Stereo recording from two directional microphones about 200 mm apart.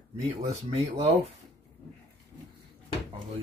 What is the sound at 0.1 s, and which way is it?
Speech, 30° right (ahead or behind).